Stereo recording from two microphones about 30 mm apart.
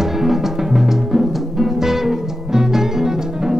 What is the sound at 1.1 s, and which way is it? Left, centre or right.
Music, centre.